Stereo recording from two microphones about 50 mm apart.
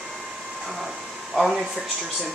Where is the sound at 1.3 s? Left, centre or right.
Centre.